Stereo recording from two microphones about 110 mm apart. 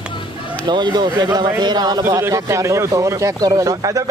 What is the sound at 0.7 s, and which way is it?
Speech, 40° right (ahead or behind).